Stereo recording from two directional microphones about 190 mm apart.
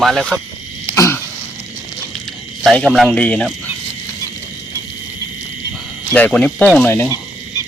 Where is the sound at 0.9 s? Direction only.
15° left (ahead or behind).